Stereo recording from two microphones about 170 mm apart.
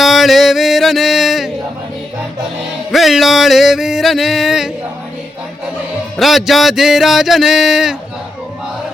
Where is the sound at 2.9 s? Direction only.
Centre (ahead or behind).